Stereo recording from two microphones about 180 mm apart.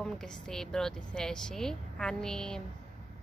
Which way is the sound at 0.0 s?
5° left (ahead or behind).